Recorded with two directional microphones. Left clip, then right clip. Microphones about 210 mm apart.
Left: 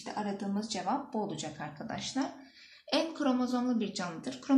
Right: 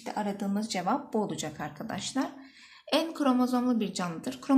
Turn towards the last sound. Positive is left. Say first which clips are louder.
# right 3 dB
turn(degrees=-40)  # may be behind; listen again after turning